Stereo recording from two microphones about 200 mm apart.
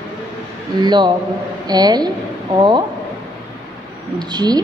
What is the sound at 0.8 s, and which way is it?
A woman's voice, 20° right (ahead or behind).